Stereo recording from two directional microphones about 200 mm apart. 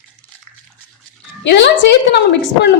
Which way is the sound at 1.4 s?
60° left (ahead or behind).